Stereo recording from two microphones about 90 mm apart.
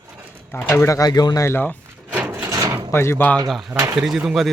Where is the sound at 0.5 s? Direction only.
25° left (ahead or behind).